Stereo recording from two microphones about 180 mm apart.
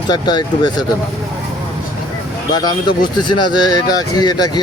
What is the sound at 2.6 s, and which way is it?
Speech, 25° left (ahead or behind).